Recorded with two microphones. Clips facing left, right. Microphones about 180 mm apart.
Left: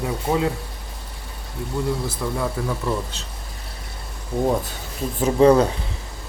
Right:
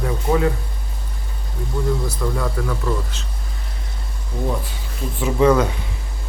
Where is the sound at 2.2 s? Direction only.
15° left (ahead or behind).